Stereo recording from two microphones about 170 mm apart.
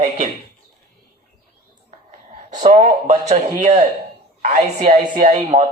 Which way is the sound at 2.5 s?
45° right (ahead or behind).